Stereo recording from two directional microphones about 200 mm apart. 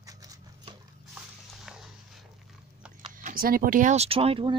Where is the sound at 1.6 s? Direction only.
Centre (ahead or behind).